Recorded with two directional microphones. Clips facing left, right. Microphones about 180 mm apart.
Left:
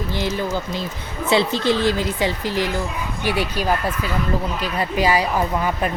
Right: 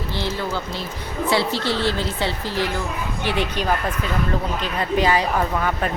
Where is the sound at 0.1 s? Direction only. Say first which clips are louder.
Left 2 dB; 15° left (ahead or behind).